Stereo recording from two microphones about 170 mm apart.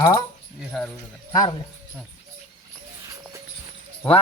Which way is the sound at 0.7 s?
5° left (ahead or behind).